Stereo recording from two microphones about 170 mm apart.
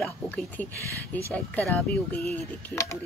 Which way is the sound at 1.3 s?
10° left (ahead or behind).